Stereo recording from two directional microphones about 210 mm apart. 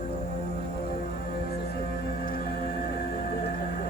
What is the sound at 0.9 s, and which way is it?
Music, 45° left (ahead or behind).